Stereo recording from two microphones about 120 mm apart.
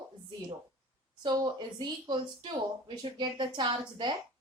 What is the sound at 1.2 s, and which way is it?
A woman's voice, 40° right (ahead or behind).